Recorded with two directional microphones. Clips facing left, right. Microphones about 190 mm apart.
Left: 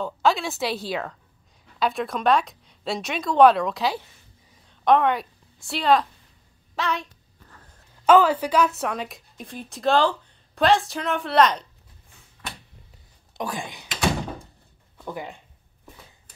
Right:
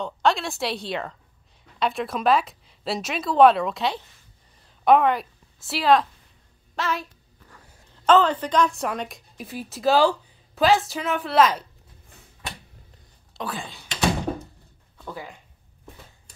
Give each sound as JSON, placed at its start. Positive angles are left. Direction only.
{"t": 0.0, "sound": "a woman's voice", "side_deg": 0}
{"t": 8.1, "sound": "a woman's voice", "side_deg": 10}
{"t": 13.3, "sound": "speech", "side_deg": 15}
{"t": 15.0, "sound": "speech", "side_deg": 15}